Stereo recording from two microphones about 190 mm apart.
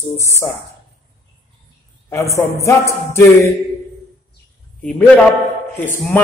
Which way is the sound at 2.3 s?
15° left (ahead or behind).